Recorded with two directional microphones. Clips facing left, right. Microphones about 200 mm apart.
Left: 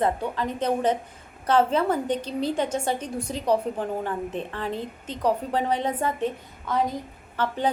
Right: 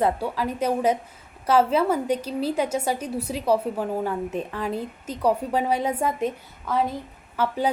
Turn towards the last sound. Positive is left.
turn(degrees=-10)  # may be behind; listen again after turning